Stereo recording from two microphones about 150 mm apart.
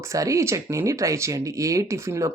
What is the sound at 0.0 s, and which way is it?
Speech, 20° right (ahead or behind).